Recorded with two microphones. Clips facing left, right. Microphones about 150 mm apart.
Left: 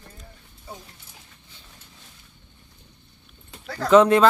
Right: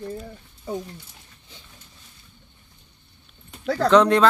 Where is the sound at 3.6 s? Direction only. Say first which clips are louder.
Right 8 dB; 70° right (ahead or behind).